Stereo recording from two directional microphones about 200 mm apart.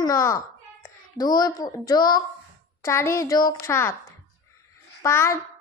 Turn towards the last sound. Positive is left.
turn(degrees=10)  # may be behind; listen again after turning